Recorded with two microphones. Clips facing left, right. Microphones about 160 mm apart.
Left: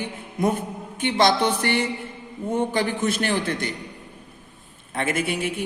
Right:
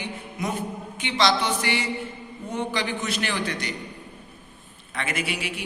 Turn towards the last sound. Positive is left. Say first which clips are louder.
# left 5 dB
turn(degrees=50)  # may be behind; listen again after turning